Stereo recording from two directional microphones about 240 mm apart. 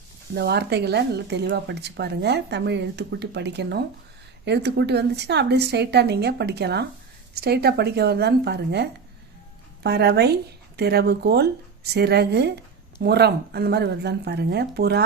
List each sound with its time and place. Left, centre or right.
0.3 s speech: right